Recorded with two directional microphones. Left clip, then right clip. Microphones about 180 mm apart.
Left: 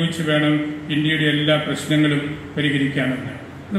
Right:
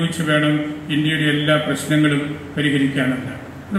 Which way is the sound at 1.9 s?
15° left (ahead or behind).